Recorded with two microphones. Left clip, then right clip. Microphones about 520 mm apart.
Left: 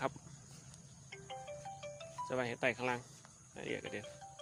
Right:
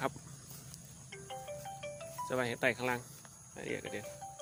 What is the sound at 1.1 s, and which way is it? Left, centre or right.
Music, left.